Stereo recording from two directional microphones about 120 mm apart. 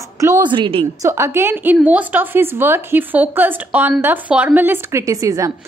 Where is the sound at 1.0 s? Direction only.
25° right (ahead or behind).